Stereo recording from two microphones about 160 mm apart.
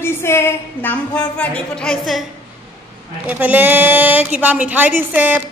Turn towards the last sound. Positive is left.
turn(degrees=-10)  # may be behind; listen again after turning